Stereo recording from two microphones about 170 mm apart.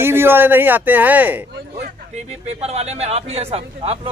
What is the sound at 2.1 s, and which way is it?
Speech, 40° right (ahead or behind).